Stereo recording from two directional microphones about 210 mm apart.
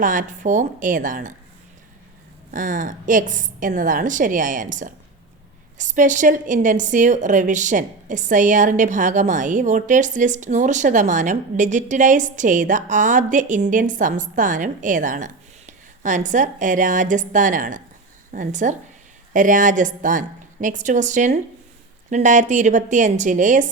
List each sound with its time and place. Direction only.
0.0 s a woman's voice: 40° right (ahead or behind)
2.5 s a woman's voice: 40° right (ahead or behind)